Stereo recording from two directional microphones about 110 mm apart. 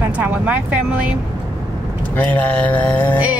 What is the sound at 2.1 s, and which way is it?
Speech, 15° left (ahead or behind).